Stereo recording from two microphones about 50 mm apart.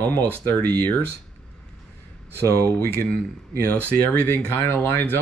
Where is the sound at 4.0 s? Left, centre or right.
Left.